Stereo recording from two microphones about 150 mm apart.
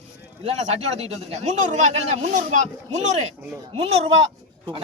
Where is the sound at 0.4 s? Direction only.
45° right (ahead or behind).